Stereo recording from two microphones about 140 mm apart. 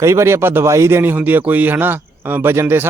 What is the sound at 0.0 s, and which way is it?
Speech, 20° right (ahead or behind).